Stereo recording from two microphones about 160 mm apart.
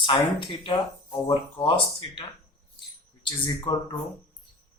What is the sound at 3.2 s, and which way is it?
Speech, 30° left (ahead or behind).